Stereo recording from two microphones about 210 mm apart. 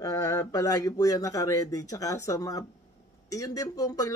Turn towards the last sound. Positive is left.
turn(degrees=15)  # may be behind; listen again after turning